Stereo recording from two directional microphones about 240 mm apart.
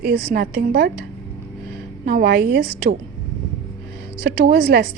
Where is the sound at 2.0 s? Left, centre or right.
Right.